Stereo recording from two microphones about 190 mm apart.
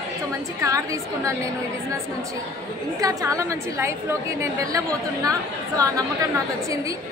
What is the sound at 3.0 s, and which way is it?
A woman's voice, 15° right (ahead or behind).